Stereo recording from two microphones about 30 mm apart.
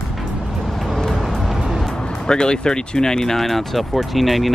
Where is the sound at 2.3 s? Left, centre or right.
Left.